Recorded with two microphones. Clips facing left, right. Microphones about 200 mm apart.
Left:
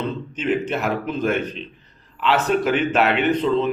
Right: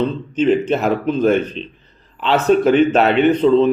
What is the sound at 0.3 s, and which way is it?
A man's voice, 30° right (ahead or behind).